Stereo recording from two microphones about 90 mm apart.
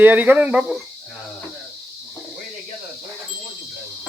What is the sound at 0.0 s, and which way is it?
Speech, 20° right (ahead or behind).